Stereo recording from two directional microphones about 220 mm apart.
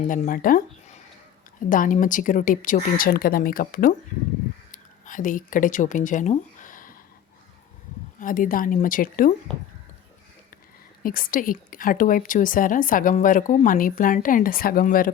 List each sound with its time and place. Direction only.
0.0 s a woman's voice: 35° left (ahead or behind)
4.7 s a sound: 35° left (ahead or behind)
8.2 s a woman's voice: 40° left (ahead or behind)
11.0 s a woman's voice: 40° left (ahead or behind)